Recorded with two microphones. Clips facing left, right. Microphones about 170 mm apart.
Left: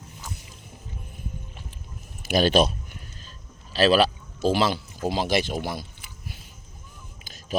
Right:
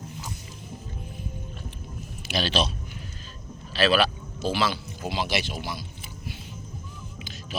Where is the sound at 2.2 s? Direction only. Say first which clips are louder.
Left 7 dB; 50° left (ahead or behind).